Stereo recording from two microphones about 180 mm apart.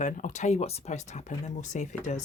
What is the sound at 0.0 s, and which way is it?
Speech, 45° left (ahead or behind).